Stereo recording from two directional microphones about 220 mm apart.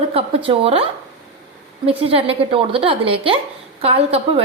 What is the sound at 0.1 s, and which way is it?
Speech, 25° right (ahead or behind).